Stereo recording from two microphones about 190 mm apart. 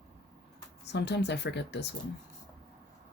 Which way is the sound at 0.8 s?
65° left (ahead or behind).